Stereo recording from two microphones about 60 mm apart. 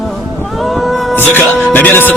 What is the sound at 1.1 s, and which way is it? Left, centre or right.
Speech, left.